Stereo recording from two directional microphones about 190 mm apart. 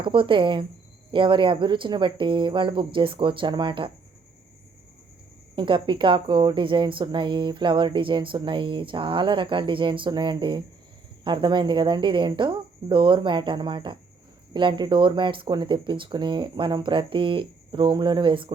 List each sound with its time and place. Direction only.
0.0 s speech: 25° right (ahead or behind)
5.5 s speech: 25° right (ahead or behind)